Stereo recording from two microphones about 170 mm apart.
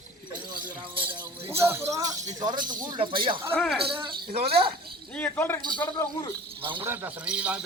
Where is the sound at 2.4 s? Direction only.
25° right (ahead or behind).